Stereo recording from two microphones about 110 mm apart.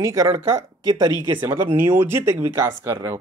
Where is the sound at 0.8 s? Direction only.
40° right (ahead or behind).